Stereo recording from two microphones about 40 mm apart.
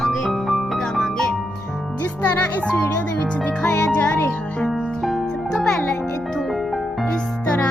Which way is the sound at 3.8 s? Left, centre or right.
Left.